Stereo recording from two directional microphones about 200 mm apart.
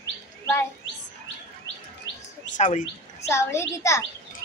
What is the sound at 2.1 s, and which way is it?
Chirp, 65° left (ahead or behind).